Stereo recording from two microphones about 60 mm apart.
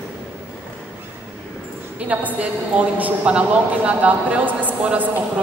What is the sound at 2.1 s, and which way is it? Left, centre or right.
A woman's voice, right.